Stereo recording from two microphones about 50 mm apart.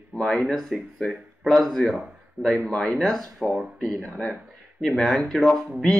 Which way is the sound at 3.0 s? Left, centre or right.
Centre.